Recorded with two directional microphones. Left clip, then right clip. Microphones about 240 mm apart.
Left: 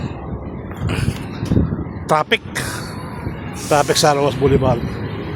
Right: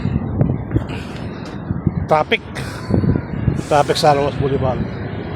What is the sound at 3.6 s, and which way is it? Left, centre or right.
Speech, centre.